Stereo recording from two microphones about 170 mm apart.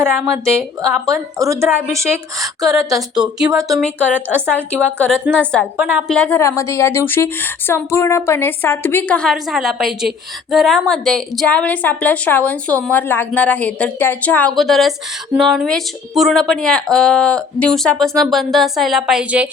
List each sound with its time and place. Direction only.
1.0 s a woman's voice: 20° right (ahead or behind)
2.6 s speech: centre (ahead or behind)
5.7 s a woman's voice: 5° right (ahead or behind)
6.1 s a woman's voice: 10° left (ahead or behind)